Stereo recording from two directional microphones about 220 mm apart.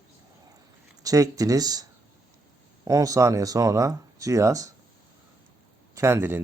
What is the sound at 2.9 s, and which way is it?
Speech, 15° right (ahead or behind).